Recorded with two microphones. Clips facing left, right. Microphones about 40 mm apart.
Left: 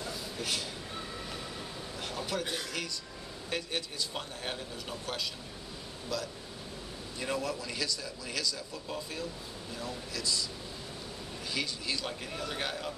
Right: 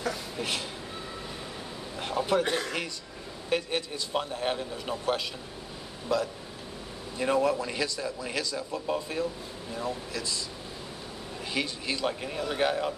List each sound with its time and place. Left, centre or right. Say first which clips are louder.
0.4 s a man's voice: right 2 dB; right
2.0 s a sound: right 9 dB; right
2.4 s speech: right 7 dB; right
3.4 s a man's voice: right 7 dB; right
11.5 s a man's voice: right 4 dB; right